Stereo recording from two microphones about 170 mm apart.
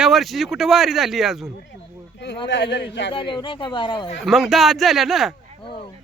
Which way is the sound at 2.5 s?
85° left.